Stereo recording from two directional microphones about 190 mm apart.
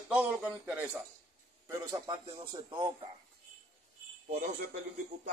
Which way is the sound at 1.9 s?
20° right (ahead or behind).